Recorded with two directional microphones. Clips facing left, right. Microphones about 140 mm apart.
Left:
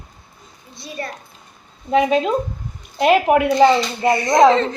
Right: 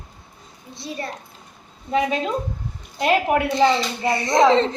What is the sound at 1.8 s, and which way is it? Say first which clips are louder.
A child's voice: left 5 dB; 20° left (ahead or behind).